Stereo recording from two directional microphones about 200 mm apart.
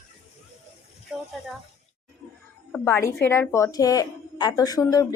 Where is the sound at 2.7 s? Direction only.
10° left (ahead or behind).